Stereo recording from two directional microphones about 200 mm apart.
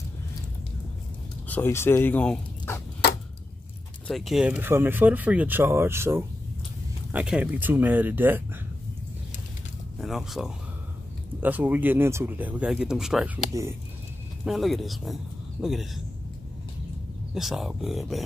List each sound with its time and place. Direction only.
1.5 s speech: 10° left (ahead or behind)
4.1 s speech: centre (ahead or behind)
9.9 s speech: centre (ahead or behind)
13.5 s speech: 15° right (ahead or behind)
14.4 s speech: centre (ahead or behind)
17.3 s speech: centre (ahead or behind)